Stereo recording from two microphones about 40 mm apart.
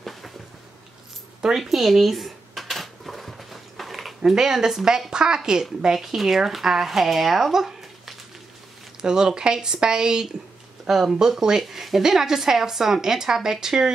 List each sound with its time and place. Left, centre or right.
0.0 s a sound: centre
1.6 s dishes: centre
4.2 s speech: centre
5.9 s speech: centre
10.9 s speech: centre